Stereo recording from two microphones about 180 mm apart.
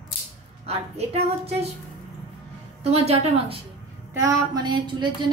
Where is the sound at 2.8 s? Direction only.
35° right (ahead or behind).